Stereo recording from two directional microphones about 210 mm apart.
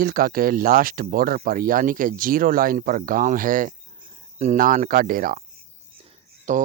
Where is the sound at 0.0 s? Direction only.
45° right (ahead or behind).